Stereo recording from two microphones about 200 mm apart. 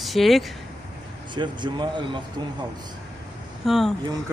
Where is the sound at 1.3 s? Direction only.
25° right (ahead or behind).